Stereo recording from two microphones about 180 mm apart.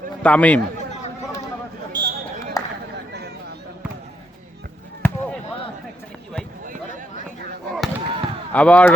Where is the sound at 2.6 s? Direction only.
20° left (ahead or behind).